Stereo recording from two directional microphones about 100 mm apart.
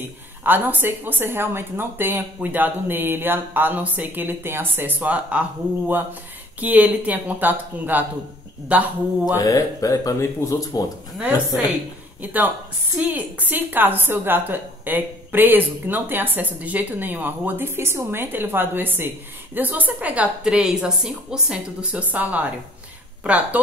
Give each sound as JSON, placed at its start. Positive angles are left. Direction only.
{"t": 0.4, "sound": "a woman's voice", "side_deg": -20}
{"t": 6.6, "sound": "speech", "side_deg": -15}
{"t": 9.4, "sound": "speech", "side_deg": 35}
{"t": 11.1, "sound": "a woman's voice", "side_deg": -15}